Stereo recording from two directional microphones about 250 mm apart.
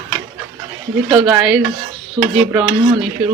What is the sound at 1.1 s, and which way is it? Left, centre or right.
Speech, centre.